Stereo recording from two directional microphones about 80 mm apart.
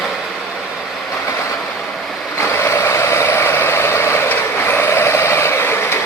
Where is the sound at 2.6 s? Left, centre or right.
Left.